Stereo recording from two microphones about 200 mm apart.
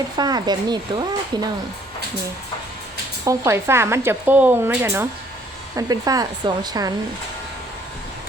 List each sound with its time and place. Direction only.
0.2 s speech: 20° right (ahead or behind)
3.2 s speech: 15° right (ahead or behind)